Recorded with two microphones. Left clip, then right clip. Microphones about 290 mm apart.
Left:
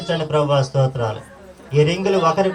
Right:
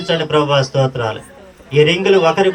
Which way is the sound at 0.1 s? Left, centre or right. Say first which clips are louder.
Right 4 dB; left.